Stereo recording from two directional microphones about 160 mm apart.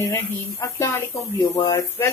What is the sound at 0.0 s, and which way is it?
Speech, 20° left (ahead or behind).